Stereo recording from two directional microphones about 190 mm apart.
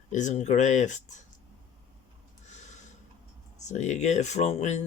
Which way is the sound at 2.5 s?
40° left (ahead or behind).